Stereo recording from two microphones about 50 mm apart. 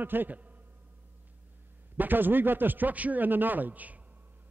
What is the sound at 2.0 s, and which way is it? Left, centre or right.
A man's voice, right.